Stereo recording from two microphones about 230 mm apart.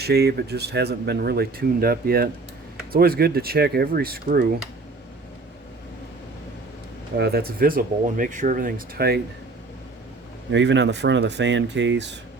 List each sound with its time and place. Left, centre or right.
0.0 s speech: right
7.2 s speech: right
10.5 s speech: right